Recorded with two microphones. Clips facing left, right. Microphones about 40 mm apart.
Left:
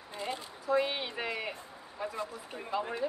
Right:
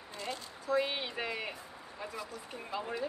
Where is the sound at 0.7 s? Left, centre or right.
Centre.